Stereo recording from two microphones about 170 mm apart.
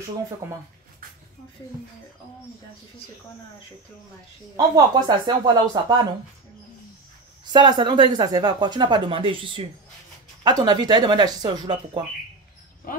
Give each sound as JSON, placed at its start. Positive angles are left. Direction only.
{"t": 0.4, "sound": "speech", "side_deg": -15}
{"t": 4.6, "sound": "speech", "side_deg": -25}
{"t": 7.5, "sound": "speech", "side_deg": -25}
{"t": 12.9, "sound": "speech", "side_deg": 55}